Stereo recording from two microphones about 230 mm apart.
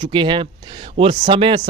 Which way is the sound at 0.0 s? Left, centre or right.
Right.